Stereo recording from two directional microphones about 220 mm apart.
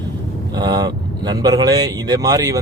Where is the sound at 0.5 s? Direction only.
20° right (ahead or behind).